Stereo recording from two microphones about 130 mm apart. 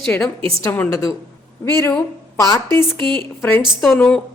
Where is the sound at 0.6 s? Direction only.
20° left (ahead or behind).